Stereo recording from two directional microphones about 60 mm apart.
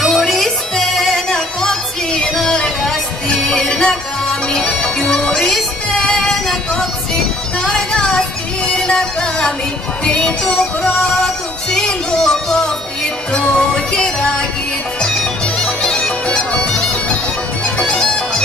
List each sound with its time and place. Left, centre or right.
0.0 s music: centre
15.6 s bagpipes: centre
17.7 s bagpipes: centre